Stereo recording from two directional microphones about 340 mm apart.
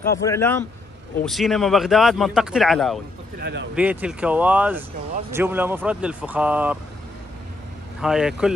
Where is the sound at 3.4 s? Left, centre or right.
Right.